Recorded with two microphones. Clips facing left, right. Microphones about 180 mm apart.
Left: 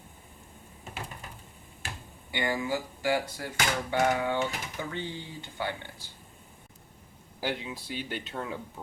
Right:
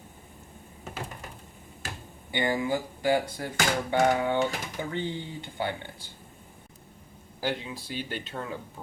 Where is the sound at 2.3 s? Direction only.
25° right (ahead or behind).